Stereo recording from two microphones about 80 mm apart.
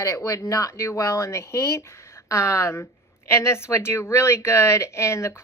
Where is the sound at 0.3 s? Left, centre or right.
Left.